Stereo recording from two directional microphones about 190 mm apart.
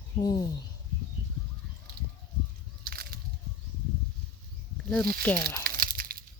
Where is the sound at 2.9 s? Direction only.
50° right (ahead or behind).